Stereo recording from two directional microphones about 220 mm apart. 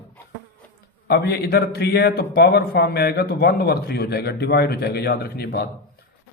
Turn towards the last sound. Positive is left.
turn(degrees=45)  # may be behind; listen again after turning